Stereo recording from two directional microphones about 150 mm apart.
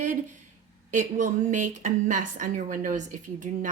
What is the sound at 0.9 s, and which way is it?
A woman's voice, 55° right (ahead or behind).